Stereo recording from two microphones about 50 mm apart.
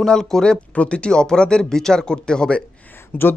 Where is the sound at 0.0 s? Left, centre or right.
Centre.